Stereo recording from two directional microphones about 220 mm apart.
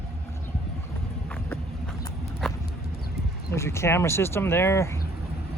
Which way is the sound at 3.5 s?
10° left (ahead or behind).